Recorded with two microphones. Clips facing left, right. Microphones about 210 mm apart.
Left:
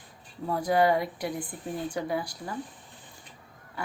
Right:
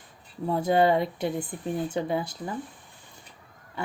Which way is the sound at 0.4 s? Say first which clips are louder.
Right 2 dB; 25° right (ahead or behind).